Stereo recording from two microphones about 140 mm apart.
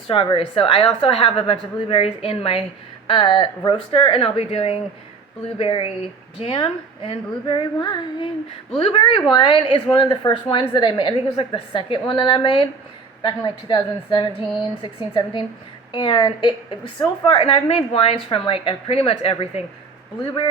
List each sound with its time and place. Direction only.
0.1 s a woman's voice: 40° left (ahead or behind)
8.8 s a woman's voice: 45° left (ahead or behind)